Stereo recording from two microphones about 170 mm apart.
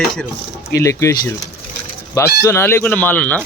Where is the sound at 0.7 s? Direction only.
15° left (ahead or behind).